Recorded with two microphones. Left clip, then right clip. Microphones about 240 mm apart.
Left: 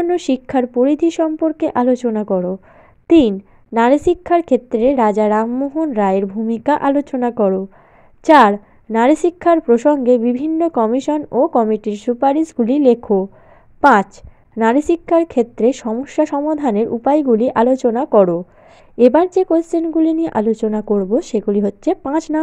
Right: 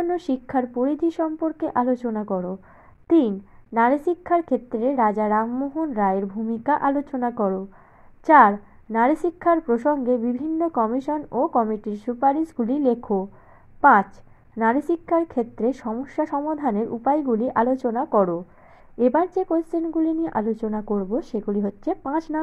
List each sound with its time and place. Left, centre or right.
0.1 s a woman's voice: left
14.7 s a woman's voice: left